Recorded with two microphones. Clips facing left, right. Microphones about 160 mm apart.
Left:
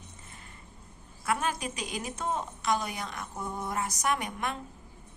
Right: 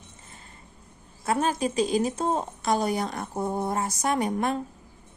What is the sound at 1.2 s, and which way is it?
A woman's voice, 30° right (ahead or behind).